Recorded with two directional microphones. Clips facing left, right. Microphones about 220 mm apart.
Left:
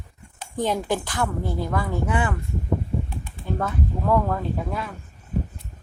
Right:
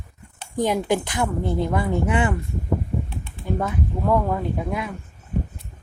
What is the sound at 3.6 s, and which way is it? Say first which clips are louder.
Speech: even; 15° right (ahead or behind).